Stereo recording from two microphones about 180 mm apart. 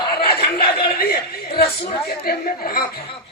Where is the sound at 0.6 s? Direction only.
60° left (ahead or behind).